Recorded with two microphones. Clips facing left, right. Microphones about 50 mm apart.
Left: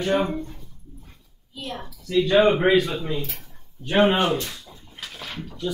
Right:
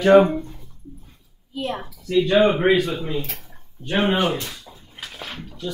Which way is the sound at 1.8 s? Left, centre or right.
Centre.